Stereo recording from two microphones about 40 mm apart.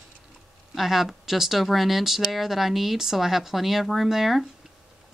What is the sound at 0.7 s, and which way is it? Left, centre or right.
Speech, centre.